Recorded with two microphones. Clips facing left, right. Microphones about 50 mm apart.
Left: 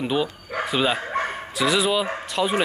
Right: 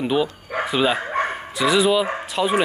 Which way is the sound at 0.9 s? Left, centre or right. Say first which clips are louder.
Right 3 dB; right.